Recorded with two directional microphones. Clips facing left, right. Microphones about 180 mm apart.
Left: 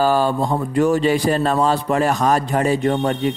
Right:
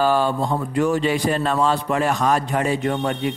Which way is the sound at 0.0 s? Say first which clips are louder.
Left 2 dB; 40° left (ahead or behind).